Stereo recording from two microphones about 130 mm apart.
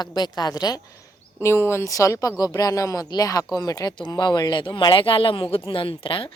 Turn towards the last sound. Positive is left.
turn(degrees=40)  # may be behind; listen again after turning